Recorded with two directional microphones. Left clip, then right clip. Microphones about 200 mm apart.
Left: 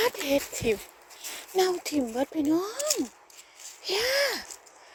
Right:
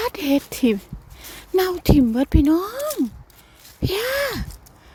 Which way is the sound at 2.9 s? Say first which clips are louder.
Right 5 dB; 10° right (ahead or behind).